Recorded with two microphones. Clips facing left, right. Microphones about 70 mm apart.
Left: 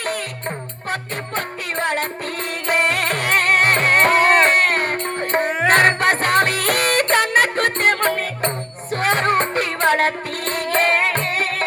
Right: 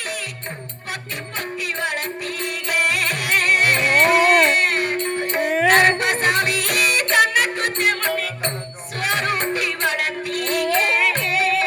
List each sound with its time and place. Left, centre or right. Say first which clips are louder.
1.4 s music: left 1 dB; left